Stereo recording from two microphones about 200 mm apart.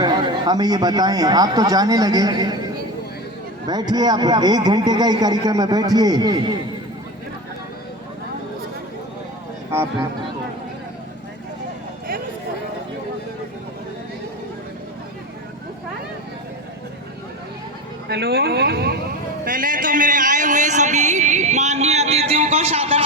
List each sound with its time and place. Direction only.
0.0 s a man's voice: 20° right (ahead or behind)
3.7 s a man's voice: 20° right (ahead or behind)
9.7 s speech: 10° right (ahead or behind)
18.1 s speech: 55° right (ahead or behind)
19.5 s a sound: 45° right (ahead or behind)